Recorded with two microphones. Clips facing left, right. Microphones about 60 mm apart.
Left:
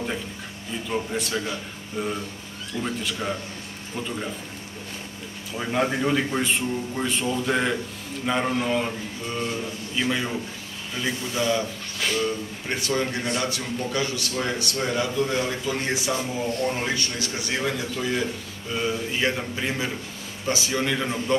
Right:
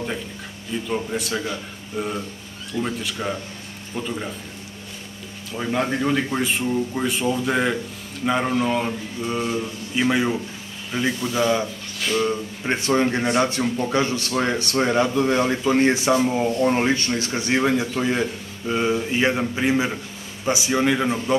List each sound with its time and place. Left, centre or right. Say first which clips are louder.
0.8 s speech: right 1 dB; centre
5.5 s a man's voice: right 1 dB; centre